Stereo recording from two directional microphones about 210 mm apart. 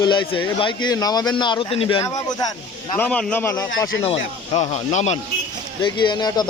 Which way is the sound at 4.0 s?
30° left (ahead or behind).